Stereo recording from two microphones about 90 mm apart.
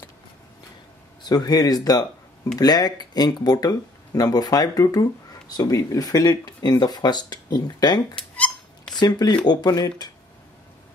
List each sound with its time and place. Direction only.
1.2 s speech: 50° left (ahead or behind)
8.2 s a sound: 10° left (ahead or behind)
8.9 s speech: 50° left (ahead or behind)